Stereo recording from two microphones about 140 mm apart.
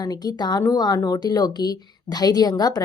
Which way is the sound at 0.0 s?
30° left (ahead or behind).